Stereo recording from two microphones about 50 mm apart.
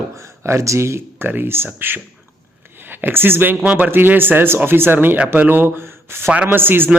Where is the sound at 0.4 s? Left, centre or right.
Right.